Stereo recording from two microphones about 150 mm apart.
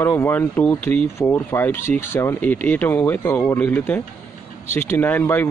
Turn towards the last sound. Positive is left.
turn(degrees=15)  # may be behind; listen again after turning